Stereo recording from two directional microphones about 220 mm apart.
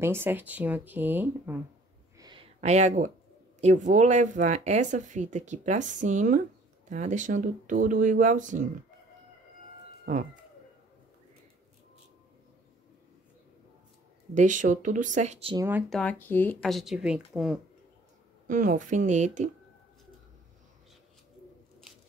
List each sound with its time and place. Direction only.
0.0 s speech: 10° right (ahead or behind)
2.1 s a sound: 20° right (ahead or behind)
2.6 s speech: 30° right (ahead or behind)
14.3 s speech: 35° right (ahead or behind)
15.5 s speech: 10° right (ahead or behind)
15.9 s a woman's voice: 5° left (ahead or behind)
18.5 s speech: 35° right (ahead or behind)